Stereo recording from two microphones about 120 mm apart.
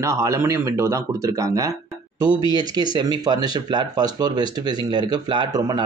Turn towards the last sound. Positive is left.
turn(degrees=-35)  # may be behind; listen again after turning